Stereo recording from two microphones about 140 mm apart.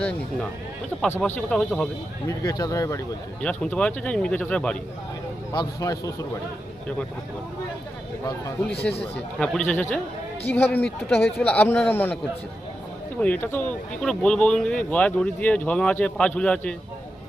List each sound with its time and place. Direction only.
1.4 s speech: 5° left (ahead or behind)
2.2 s speech: 25° left (ahead or behind)
3.4 s speech: 5° left (ahead or behind)
5.5 s speech: 25° left (ahead or behind)
8.2 s speech: 20° left (ahead or behind)
9.4 s speech: 5° left (ahead or behind)
13.1 s speech: 10° left (ahead or behind)